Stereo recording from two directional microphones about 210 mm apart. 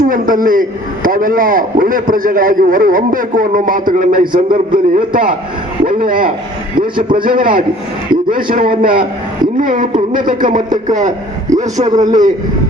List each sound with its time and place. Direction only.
0.1 s a man's voice: 40° right (ahead or behind)